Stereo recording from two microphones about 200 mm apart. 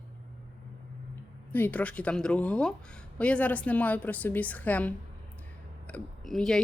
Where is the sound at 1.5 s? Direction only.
10° left (ahead or behind).